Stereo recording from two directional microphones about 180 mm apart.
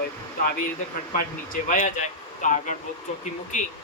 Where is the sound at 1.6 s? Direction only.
45° left (ahead or behind).